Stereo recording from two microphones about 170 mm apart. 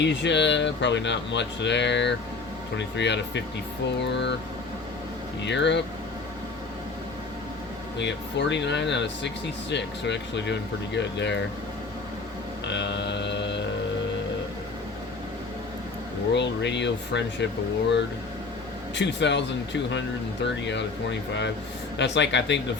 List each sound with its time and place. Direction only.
0.0 s speech: 90° left
5.4 s speech: 90° left
7.9 s speech: 90° left
12.6 s a sound: 90° left
16.3 s speech: 90° left
18.9 s speech: 90° left